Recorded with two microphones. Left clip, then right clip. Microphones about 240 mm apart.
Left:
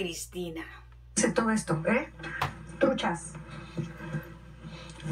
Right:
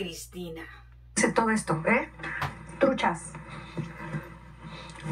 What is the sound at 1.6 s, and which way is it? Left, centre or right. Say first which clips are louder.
Speech: right 3 dB; right.